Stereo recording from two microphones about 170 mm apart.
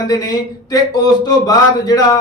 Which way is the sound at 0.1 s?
20° left (ahead or behind).